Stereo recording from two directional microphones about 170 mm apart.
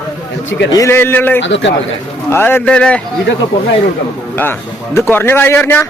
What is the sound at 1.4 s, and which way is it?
Speech, 90° left.